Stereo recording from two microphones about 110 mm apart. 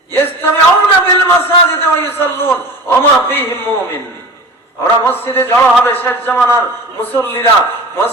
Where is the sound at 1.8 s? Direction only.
20° left (ahead or behind).